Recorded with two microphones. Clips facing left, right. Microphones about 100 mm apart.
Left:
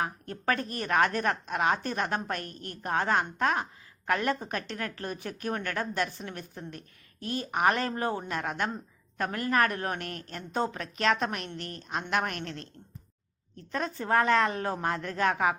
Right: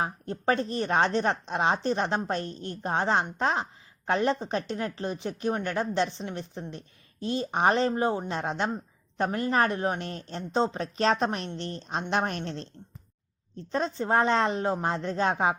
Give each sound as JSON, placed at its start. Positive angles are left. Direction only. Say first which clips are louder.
{"t": 0.0, "sound": "speech", "louder": "right 3 dB", "side_deg": -25}